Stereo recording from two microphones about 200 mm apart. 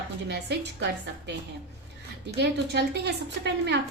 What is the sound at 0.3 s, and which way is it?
A woman's voice, 55° right (ahead or behind).